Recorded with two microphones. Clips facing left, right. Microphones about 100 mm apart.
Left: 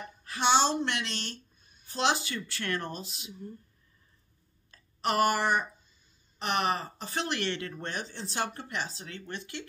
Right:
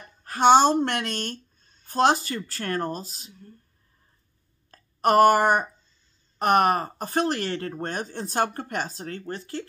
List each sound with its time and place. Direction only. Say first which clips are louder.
0.2 s speech: right 9 dB; 45° right (ahead or behind)
1.6 s a sound: right 1 dB; 15° left (ahead or behind)
1.9 s speech: right 8 dB; 45° right (ahead or behind)
4.6 s speech: right 9 dB; 50° right (ahead or behind)